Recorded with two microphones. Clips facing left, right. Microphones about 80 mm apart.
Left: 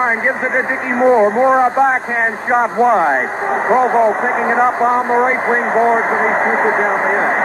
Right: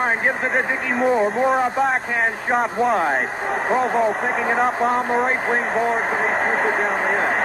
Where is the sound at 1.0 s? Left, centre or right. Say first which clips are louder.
Left 8 dB; left.